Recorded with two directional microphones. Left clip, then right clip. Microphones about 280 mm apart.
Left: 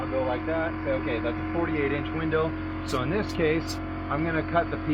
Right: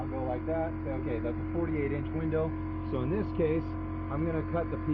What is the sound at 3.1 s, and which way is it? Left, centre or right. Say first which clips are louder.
Speech: left 4 dB; left.